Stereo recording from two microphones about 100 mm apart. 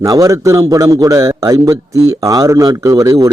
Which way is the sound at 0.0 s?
35° right (ahead or behind).